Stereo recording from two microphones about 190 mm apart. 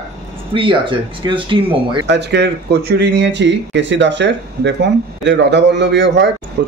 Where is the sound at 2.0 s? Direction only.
65° right (ahead or behind).